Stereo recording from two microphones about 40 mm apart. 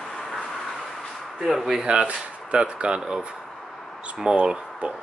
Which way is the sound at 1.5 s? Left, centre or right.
Centre.